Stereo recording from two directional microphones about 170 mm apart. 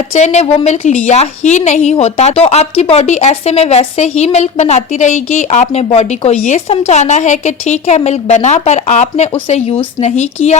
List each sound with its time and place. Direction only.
0.1 s a woman's voice: 40° left (ahead or behind)